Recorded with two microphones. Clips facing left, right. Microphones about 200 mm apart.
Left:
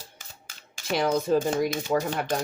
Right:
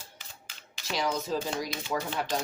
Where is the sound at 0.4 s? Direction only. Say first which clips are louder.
Left 7 dB; 55° left (ahead or behind).